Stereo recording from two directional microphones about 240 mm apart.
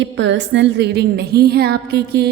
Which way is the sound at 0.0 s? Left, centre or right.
Right.